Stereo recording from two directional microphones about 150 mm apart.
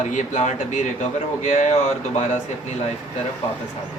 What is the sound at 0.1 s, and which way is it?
Speech, 55° left (ahead or behind).